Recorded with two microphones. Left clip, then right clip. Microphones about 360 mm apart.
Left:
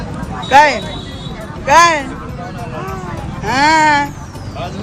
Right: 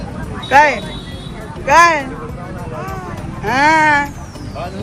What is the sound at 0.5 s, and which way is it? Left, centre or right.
Speech, centre.